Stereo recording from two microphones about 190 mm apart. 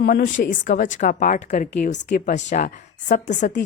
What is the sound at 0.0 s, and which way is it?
A woman's voice, 55° left (ahead or behind).